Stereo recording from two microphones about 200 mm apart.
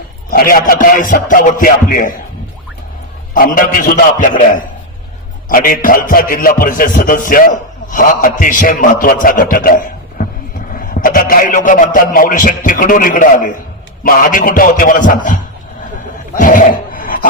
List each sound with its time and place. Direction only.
0.3 s a man's voice: 45° left (ahead or behind)
3.3 s speech: 45° left (ahead or behind)
16.3 s a sound: 45° left (ahead or behind)